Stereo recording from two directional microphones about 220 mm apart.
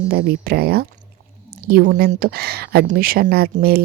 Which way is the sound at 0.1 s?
45° right (ahead or behind).